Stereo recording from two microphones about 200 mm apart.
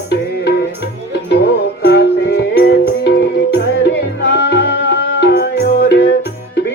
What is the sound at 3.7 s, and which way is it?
Music, 55° left (ahead or behind).